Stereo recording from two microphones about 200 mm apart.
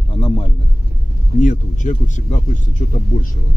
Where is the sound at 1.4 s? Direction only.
40° left (ahead or behind).